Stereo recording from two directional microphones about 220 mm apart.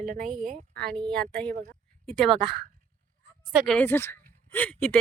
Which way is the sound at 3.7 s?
10° left (ahead or behind).